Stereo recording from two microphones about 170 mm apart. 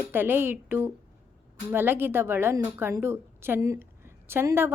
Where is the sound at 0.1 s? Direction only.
15° right (ahead or behind).